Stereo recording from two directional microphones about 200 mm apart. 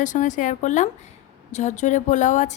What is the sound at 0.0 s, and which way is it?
A woman's voice, 40° left (ahead or behind).